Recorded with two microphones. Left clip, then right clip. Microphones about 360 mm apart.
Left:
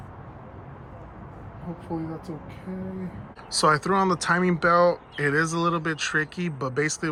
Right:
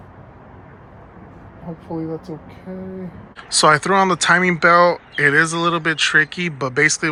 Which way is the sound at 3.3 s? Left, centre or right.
Centre.